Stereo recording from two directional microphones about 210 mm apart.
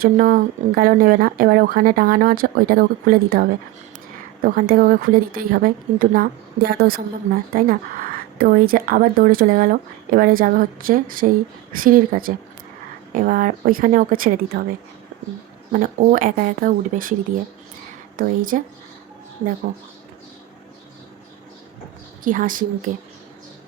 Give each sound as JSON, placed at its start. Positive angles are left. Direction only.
{"t": 0.0, "sound": "speech", "side_deg": -40}
{"t": 4.4, "sound": "speech", "side_deg": -40}
{"t": 15.7, "sound": "speech", "side_deg": -40}
{"t": 18.2, "sound": "speech", "side_deg": -40}
{"t": 22.2, "sound": "speech", "side_deg": -40}